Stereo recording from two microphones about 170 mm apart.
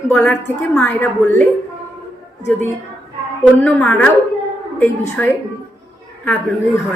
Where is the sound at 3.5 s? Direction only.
5° left (ahead or behind).